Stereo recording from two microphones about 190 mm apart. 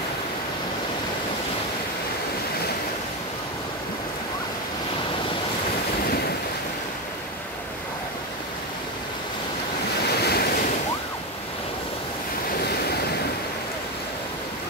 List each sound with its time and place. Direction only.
10.0 s waves: 55° left (ahead or behind)
12.5 s waves: 55° left (ahead or behind)